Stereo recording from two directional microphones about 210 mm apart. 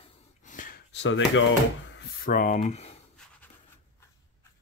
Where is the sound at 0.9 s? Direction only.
60° left (ahead or behind).